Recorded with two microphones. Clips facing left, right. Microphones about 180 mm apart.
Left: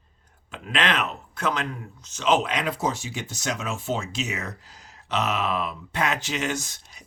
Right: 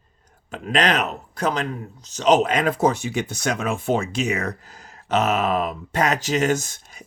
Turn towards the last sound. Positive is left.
turn(degrees=-50)  # may be behind; listen again after turning